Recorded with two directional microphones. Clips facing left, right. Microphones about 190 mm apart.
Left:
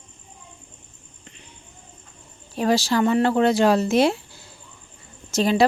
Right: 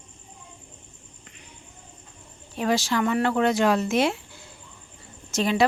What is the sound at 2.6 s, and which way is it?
Speech, 35° left (ahead or behind).